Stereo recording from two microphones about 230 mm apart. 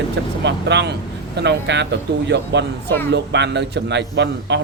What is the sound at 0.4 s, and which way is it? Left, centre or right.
A man's voice, right.